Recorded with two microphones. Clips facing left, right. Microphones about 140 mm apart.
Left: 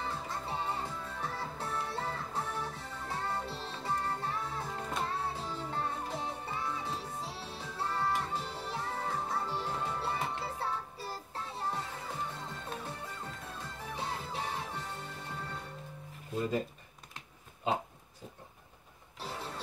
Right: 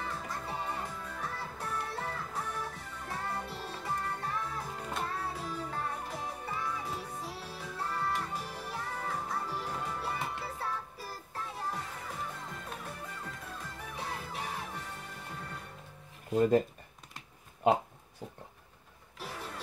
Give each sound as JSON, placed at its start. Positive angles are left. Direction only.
{"t": 0.0, "sound": "music", "side_deg": 30}
{"t": 19.1, "sound": "music", "side_deg": 30}